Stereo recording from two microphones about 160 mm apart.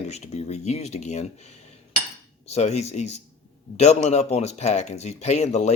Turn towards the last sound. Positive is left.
turn(degrees=45)  # may be behind; listen again after turning